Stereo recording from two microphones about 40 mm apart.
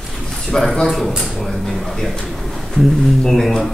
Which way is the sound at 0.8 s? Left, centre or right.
Centre.